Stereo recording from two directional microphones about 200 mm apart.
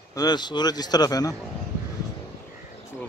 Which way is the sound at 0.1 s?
20° left (ahead or behind).